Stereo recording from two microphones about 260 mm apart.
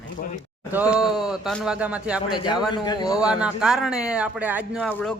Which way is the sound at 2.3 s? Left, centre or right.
Centre.